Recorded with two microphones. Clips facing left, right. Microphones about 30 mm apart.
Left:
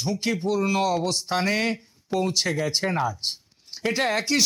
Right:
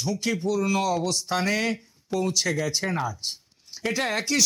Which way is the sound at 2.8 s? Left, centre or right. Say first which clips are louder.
Left 3 dB; centre.